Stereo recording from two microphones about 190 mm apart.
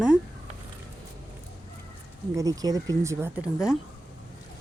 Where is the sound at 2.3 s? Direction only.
20° right (ahead or behind).